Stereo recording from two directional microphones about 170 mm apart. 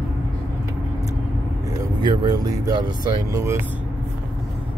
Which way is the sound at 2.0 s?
25° right (ahead or behind).